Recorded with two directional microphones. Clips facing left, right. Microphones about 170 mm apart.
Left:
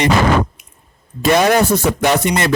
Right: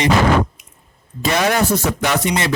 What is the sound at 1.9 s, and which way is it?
Music, 55° left (ahead or behind).